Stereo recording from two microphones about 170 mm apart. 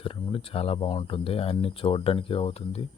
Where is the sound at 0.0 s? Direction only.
30° left (ahead or behind).